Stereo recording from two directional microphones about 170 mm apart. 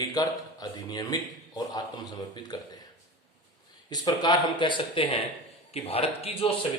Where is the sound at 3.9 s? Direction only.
25° left (ahead or behind).